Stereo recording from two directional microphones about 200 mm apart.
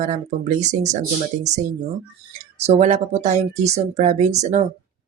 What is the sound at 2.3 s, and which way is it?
Speech, 35° right (ahead or behind).